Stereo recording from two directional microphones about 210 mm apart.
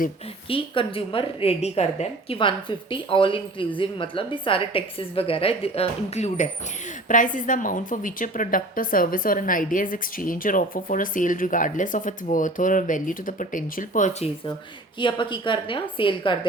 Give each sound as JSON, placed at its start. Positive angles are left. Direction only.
{"t": 0.4, "sound": "a woman's voice", "side_deg": 25}
{"t": 14.9, "sound": "a woman's voice", "side_deg": 20}